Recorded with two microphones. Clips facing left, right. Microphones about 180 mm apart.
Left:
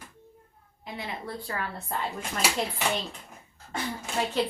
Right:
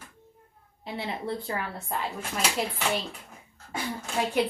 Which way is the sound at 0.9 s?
25° right (ahead or behind).